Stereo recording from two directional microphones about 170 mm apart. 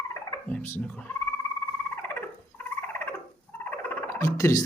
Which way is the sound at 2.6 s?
10° left (ahead or behind).